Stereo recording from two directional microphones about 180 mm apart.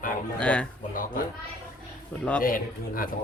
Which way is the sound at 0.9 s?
50° left (ahead or behind).